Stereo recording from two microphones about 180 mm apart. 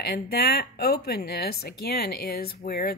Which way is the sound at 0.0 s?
60° left (ahead or behind).